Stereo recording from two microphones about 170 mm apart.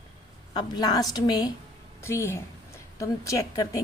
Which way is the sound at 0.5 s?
25° left (ahead or behind).